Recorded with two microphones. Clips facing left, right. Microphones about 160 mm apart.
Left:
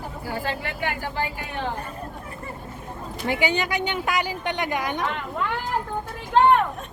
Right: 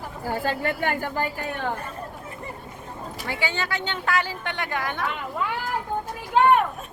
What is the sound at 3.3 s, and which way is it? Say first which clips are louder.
A woman's voice: left 5 dB; 15° left (ahead or behind).